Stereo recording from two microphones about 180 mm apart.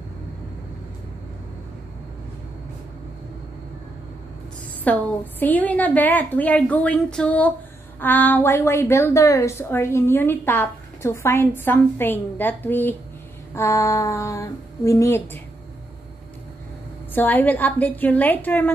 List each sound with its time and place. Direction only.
4.8 s a woman's voice: 10° left (ahead or behind)
17.1 s a woman's voice: 10° left (ahead or behind)